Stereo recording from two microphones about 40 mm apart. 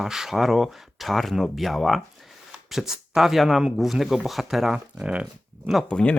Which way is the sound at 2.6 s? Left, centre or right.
Centre.